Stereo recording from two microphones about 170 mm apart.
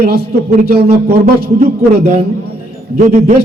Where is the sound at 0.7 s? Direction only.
65° right (ahead or behind).